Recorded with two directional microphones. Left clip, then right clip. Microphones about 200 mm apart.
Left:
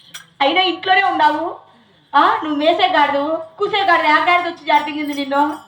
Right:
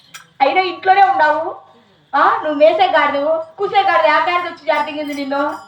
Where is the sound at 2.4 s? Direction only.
25° left (ahead or behind).